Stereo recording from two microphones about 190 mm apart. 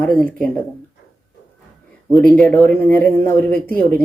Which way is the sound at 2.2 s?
5° left (ahead or behind).